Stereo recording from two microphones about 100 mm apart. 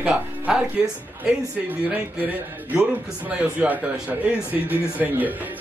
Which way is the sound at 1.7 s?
15° right (ahead or behind).